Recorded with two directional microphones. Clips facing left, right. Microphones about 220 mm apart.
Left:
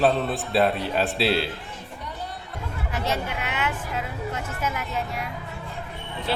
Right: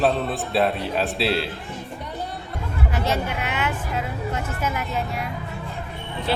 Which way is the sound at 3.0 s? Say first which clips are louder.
Right 1 dB; 35° right (ahead or behind).